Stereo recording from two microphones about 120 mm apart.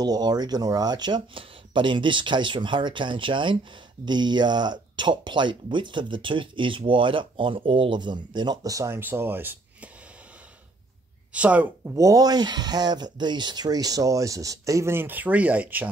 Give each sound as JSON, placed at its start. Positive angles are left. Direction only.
{"t": 0.0, "sound": "speech", "side_deg": -35}
{"t": 11.3, "sound": "speech", "side_deg": -10}
{"t": 11.9, "sound": "speech", "side_deg": -25}